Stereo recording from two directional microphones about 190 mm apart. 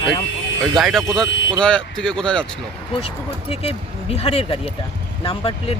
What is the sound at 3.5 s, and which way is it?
Speech, 30° left (ahead or behind).